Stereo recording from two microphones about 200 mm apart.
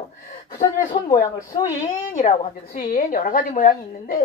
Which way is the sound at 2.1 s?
35° left (ahead or behind).